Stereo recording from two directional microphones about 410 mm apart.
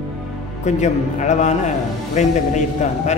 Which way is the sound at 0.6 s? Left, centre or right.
Centre.